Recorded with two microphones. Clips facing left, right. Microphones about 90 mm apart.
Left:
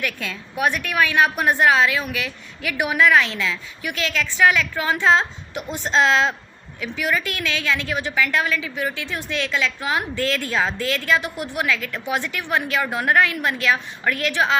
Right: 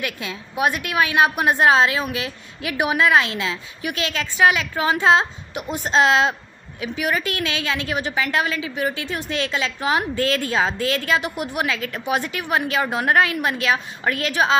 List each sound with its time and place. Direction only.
0.0 s a woman's voice: 15° right (ahead or behind)